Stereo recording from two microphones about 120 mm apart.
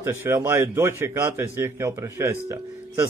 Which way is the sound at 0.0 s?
25° right (ahead or behind).